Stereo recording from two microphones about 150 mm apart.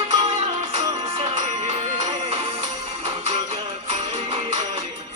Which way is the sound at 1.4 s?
50° right (ahead or behind).